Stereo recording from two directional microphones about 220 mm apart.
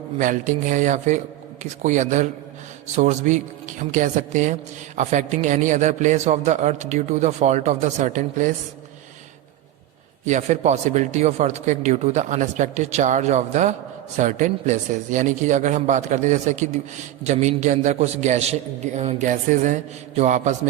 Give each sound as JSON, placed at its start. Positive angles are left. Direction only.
{"t": 0.2, "sound": "a man's voice", "side_deg": -35}
{"t": 10.2, "sound": "a man's voice", "side_deg": -35}